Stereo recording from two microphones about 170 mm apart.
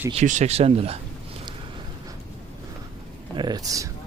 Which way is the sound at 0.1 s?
45° right (ahead or behind).